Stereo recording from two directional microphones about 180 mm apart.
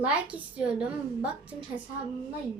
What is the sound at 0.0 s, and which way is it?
A woman's voice, 5° right (ahead or behind).